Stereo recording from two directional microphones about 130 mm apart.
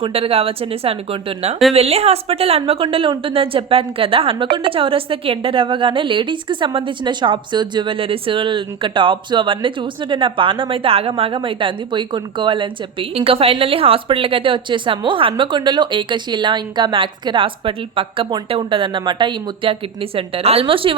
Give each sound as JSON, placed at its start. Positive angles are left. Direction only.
{"t": 0.0, "sound": "a woman's voice", "side_deg": -45}